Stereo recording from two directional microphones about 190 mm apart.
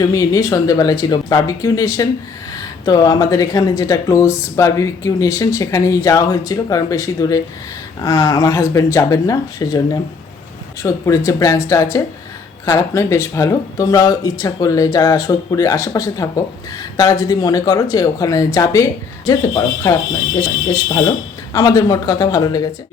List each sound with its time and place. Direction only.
0.0 s speech: 20° left (ahead or behind)